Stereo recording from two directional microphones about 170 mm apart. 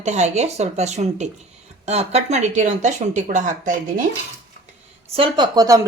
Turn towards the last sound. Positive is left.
turn(degrees=-25)  # may be behind; listen again after turning